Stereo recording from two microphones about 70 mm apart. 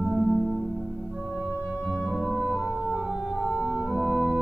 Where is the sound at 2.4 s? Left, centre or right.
Right.